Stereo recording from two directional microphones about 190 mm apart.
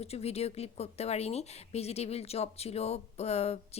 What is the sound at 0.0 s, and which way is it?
Speech, 35° left (ahead or behind).